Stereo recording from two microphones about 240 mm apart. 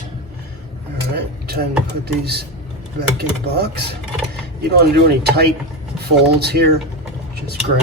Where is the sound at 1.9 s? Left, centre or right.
Right.